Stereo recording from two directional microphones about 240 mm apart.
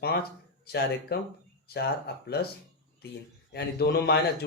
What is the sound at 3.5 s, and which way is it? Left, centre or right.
Speech, left.